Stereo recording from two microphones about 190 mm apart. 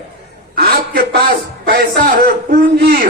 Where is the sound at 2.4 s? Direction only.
55° right (ahead or behind).